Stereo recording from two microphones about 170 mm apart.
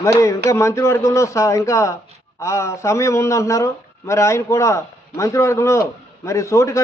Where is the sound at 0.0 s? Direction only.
15° left (ahead or behind).